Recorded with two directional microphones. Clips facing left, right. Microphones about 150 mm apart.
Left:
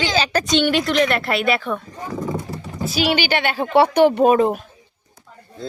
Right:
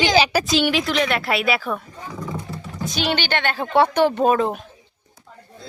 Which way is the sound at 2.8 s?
5° left (ahead or behind).